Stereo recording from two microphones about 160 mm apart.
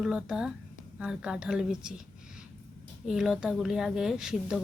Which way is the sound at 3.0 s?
5° right (ahead or behind).